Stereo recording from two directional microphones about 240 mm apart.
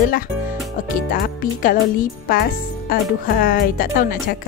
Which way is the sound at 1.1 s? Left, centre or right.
Left.